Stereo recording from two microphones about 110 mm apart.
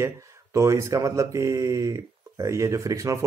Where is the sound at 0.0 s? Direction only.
25° right (ahead or behind).